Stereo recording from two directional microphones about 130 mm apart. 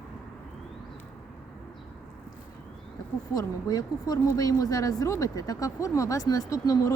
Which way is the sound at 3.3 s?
30° left (ahead or behind).